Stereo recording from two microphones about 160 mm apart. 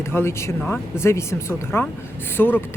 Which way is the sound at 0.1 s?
15° left (ahead or behind).